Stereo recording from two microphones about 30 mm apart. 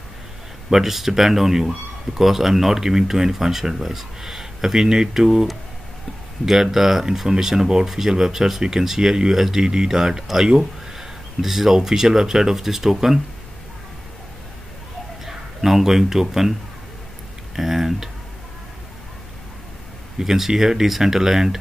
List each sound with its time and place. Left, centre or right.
0.7 s speech: centre
15.2 s speech: centre
17.6 s speech: centre
20.2 s speech: centre